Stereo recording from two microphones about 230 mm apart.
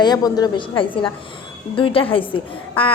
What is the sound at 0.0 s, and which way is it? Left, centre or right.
A woman's voice, centre.